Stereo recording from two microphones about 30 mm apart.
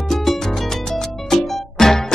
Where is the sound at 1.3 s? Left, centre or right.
Centre.